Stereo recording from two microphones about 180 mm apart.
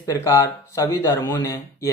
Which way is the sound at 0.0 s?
15° left (ahead or behind).